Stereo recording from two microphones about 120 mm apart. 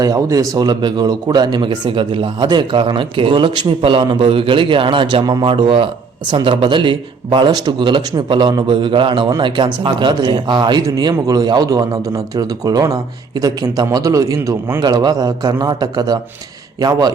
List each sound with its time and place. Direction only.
0.0 s a man's voice: 30° right (ahead or behind)